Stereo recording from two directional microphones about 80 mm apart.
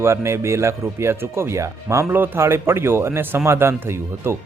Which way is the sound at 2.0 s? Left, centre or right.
Right.